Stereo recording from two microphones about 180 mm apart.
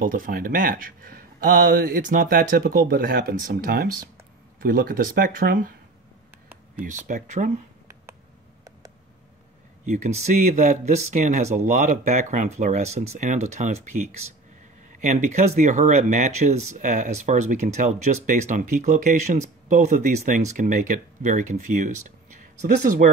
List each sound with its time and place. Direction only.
0.0 s speech: 50° right (ahead or behind)
6.9 s speech: 45° right (ahead or behind)
9.8 s speech: 40° right (ahead or behind)
14.9 s speech: 45° right (ahead or behind)